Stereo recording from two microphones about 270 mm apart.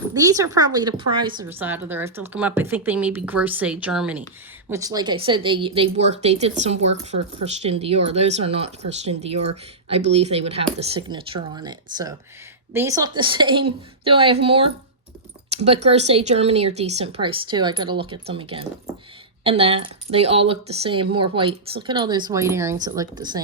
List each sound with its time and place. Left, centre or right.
0.1 s a woman's voice: centre